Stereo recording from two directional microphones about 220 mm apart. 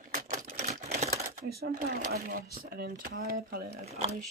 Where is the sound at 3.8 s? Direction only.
30° right (ahead or behind).